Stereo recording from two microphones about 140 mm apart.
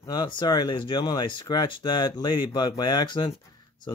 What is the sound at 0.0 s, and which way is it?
Speech, 30° left (ahead or behind).